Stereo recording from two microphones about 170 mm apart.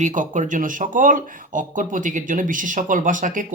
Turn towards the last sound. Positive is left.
turn(degrees=-50)  # may be behind; listen again after turning